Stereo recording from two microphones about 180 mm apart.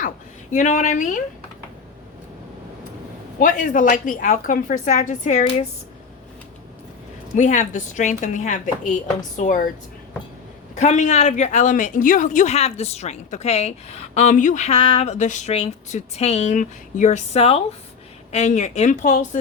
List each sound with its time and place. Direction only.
0.5 s a woman's voice: 45° left (ahead or behind)
3.4 s a woman's voice: 45° left (ahead or behind)
7.3 s a woman's voice: 45° left (ahead or behind)
10.8 s speech: 40° left (ahead or behind)